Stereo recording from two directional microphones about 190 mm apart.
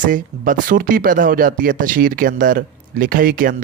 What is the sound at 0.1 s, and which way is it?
Speech, 45° right (ahead or behind).